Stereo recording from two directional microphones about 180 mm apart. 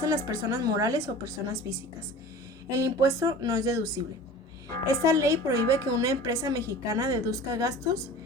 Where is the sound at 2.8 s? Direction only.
20° right (ahead or behind).